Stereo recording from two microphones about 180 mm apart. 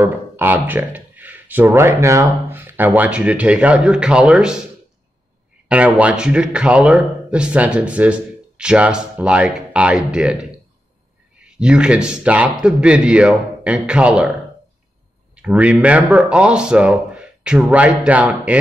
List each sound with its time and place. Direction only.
0.0 s speech: 10° right (ahead or behind)
5.7 s speech: 5° right (ahead or behind)
11.4 s speech: 5° right (ahead or behind)
15.3 s speech: 5° right (ahead or behind)